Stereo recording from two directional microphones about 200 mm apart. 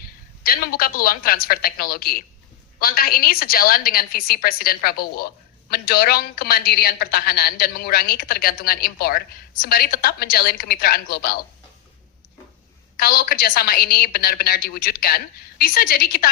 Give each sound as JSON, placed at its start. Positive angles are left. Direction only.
{"t": 0.4, "sound": "a woman's voice", "side_deg": 45}
{"t": 13.0, "sound": "a woman's voice", "side_deg": 50}